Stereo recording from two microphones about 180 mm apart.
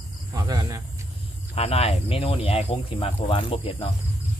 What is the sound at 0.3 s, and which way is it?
Cricket, 20° right (ahead or behind).